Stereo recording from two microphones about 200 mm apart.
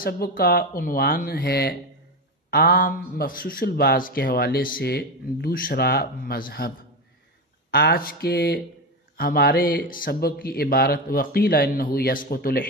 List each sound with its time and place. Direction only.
0.0 s speech: 45° left (ahead or behind)
7.7 s speech: 50° left (ahead or behind)